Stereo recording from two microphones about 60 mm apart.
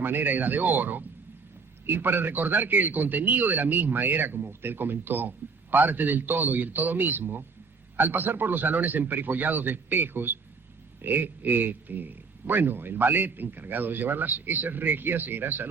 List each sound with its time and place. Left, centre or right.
0.0 s a man's voice: right